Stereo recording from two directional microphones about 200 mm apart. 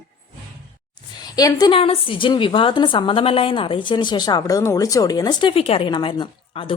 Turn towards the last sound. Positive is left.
turn(degrees=25)  # may be behind; listen again after turning